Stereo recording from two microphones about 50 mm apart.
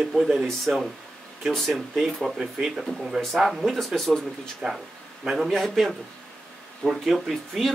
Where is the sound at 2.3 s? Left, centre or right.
Centre.